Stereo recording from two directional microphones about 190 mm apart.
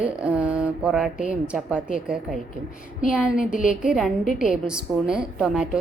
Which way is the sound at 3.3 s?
45° left (ahead or behind).